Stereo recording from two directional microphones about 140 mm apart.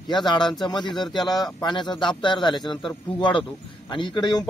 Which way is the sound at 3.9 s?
35° left (ahead or behind).